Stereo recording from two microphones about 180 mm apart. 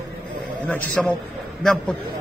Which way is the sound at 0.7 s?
5° left (ahead or behind).